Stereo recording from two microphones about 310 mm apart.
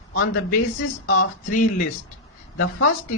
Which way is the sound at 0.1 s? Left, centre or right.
Left.